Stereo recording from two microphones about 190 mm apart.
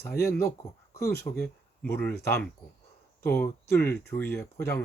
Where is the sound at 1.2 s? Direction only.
10° left (ahead or behind).